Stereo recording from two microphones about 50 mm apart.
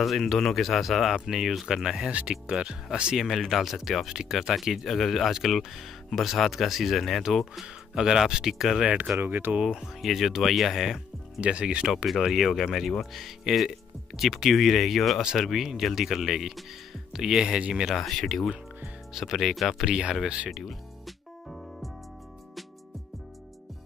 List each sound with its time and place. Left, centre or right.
0.0 s speech: centre
2.0 s speech: right
3.2 s speech: centre
7.6 s speech: centre
8.8 s speech: right
9.2 s speech: right
9.7 s speech: centre
11.4 s speech: right
12.1 s speech: centre
17.8 s speech: centre
19.9 s speech: centre
20.4 s speech: centre